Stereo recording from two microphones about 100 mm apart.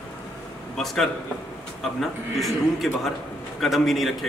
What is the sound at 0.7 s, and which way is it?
A man's voice, 5° left (ahead or behind).